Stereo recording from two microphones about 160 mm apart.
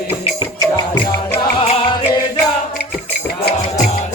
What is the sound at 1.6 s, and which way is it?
Music, 35° left (ahead or behind).